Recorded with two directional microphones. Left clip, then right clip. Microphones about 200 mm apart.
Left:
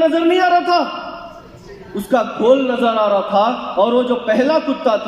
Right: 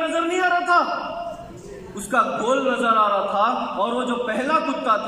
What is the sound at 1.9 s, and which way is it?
A man's voice, 25° left (ahead or behind).